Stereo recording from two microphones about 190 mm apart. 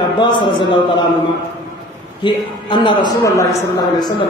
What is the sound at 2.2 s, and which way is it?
A man's voice, 25° left (ahead or behind).